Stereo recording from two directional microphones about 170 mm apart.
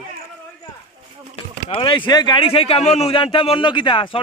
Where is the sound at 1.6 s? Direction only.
30° left (ahead or behind).